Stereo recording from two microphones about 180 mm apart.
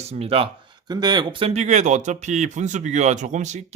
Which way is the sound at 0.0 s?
35° right (ahead or behind).